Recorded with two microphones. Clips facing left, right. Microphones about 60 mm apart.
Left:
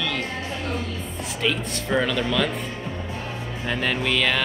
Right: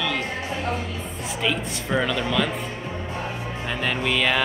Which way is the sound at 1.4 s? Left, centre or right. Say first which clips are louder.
Left 1 dB; centre.